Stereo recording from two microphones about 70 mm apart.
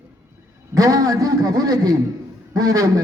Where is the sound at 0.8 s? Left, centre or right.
Right.